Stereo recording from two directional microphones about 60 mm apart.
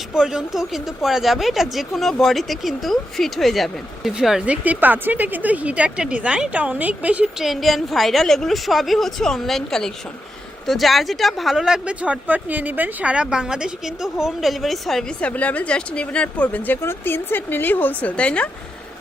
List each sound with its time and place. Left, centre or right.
0.1 s a woman's voice: centre
4.4 s speech: right
7.3 s speech: centre
12.0 s a woman's voice: right; by 15.0 s centre
15.2 s speech: left
16.8 s a woman's voice: left
18.2 s speech: centre